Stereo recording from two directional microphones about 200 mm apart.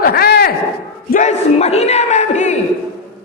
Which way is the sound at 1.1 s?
35° left (ahead or behind).